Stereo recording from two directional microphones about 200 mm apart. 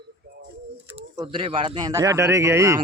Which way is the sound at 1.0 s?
25° right (ahead or behind).